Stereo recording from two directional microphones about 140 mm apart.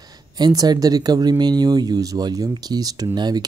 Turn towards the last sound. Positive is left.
turn(degrees=-30)  # may be behind; listen again after turning